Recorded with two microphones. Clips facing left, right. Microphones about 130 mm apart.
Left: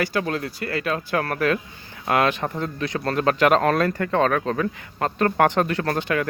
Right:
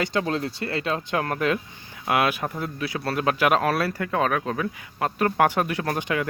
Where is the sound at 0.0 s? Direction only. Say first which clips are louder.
Left 1 dB; 20° right (ahead or behind).